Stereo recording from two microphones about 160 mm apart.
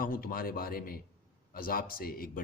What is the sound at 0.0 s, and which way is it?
A man's voice, 60° left (ahead or behind).